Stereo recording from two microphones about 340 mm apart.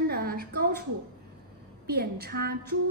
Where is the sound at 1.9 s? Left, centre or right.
Right.